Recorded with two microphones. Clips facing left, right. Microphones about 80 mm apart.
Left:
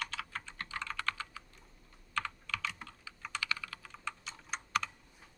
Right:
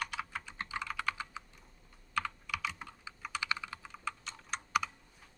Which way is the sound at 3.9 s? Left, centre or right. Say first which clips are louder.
Right 2 dB; centre.